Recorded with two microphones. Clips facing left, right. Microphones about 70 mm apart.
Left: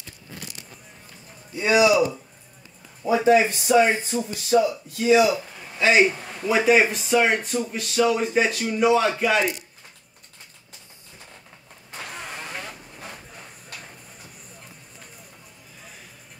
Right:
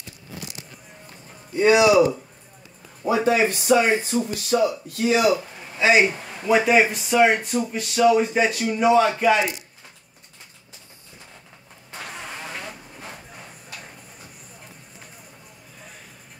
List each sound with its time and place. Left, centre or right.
1.6 s speech: right
3.1 s speech: right
5.8 s a man's voice: centre
6.5 s speech: centre